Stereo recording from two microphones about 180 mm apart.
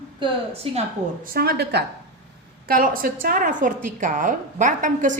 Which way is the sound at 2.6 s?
50° right (ahead or behind).